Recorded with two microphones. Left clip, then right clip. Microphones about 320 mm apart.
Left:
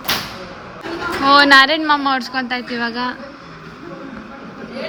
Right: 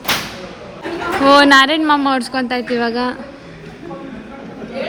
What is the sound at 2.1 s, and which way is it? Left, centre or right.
Speech, centre.